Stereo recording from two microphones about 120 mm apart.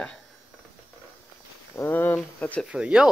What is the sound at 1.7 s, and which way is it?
Speech, 20° left (ahead or behind).